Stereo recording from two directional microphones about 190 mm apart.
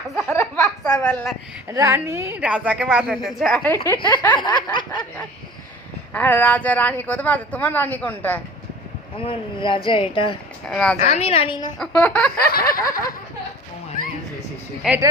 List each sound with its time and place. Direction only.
0.3 s a sound: 15° left (ahead or behind)
1.6 s a woman's voice: 15° right (ahead or behind); by 3.7 s centre (ahead or behind)
3.8 s speech: 25° left (ahead or behind)
6.1 s speech: 10° left (ahead or behind)
9.1 s speech: 25° left (ahead or behind)
10.7 s a woman's voice: 5° left (ahead or behind)
11.0 s speech: 35° left (ahead or behind)
11.8 s a woman's voice: 5° left (ahead or behind)
12.5 s a sound: 50° left (ahead or behind)